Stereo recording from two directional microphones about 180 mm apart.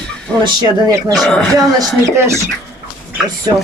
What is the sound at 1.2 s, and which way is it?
Speech, centre (ahead or behind).